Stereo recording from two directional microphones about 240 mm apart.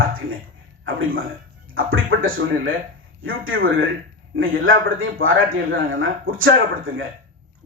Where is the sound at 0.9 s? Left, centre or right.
Right.